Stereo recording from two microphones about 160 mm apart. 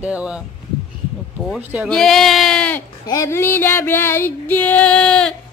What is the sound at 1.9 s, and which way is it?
Speech, 5° left (ahead or behind).